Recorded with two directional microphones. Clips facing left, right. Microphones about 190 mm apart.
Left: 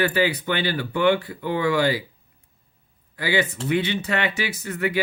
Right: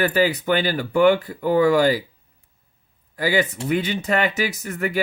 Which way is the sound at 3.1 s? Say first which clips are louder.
Right 3 dB; 45° right (ahead or behind).